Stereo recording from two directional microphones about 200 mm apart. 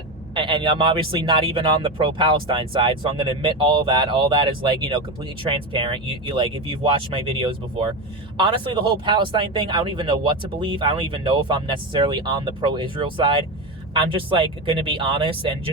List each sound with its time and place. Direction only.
0.3 s speech: 25° right (ahead or behind)